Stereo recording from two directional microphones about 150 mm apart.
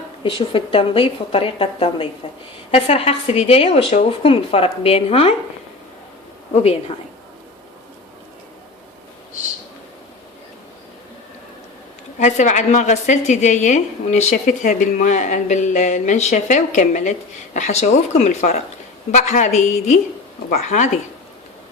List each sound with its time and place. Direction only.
0.2 s speech: 35° left (ahead or behind)
6.5 s a woman's voice: 45° left (ahead or behind)
12.2 s a woman's voice: 55° left (ahead or behind)